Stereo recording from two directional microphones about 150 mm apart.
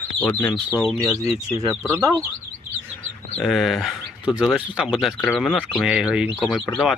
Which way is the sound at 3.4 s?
Centre (ahead or behind).